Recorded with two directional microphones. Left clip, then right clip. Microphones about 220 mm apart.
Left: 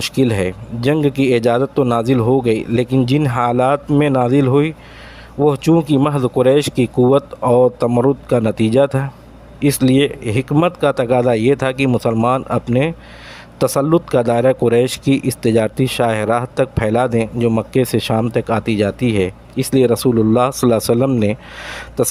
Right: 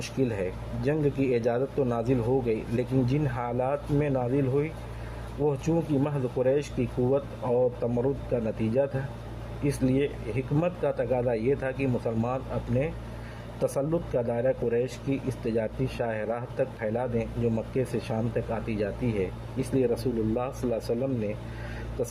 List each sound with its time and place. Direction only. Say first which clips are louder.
0.0 s speech: left 12 dB; 35° left (ahead or behind)